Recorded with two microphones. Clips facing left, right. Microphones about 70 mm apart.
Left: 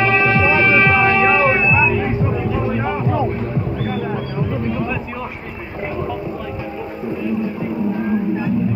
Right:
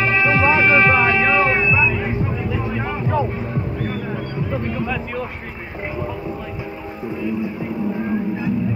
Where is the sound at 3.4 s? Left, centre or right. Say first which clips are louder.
Left 2 dB; centre.